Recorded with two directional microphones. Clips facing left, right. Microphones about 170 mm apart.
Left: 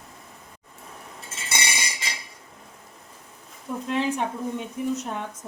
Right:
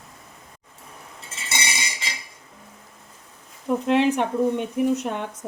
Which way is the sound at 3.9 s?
70° right (ahead or behind).